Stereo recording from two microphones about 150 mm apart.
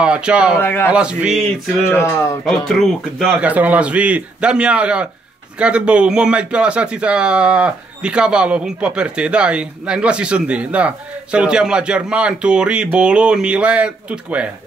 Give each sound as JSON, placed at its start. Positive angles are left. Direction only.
{"t": 0.0, "sound": "a man's voice", "side_deg": -5}
{"t": 0.6, "sound": "speech", "side_deg": 15}
{"t": 0.8, "sound": "a man's voice", "side_deg": -5}
{"t": 1.9, "sound": "speech", "side_deg": 15}
{"t": 2.4, "sound": "a man's voice", "side_deg": 0}